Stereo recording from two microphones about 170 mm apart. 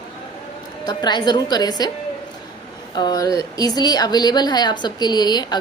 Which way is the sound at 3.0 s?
25° left (ahead or behind).